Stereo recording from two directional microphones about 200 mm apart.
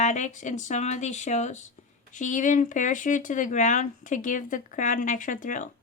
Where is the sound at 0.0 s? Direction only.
35° left (ahead or behind).